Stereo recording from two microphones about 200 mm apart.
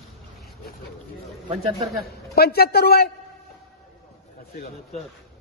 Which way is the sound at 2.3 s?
50° left (ahead or behind).